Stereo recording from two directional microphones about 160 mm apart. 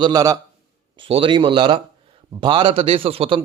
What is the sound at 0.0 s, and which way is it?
Speech, 25° right (ahead or behind).